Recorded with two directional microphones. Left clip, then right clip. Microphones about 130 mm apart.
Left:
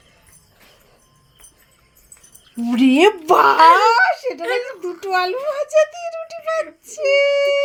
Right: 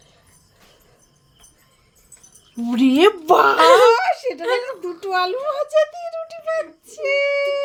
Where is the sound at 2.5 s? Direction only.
15° left (ahead or behind).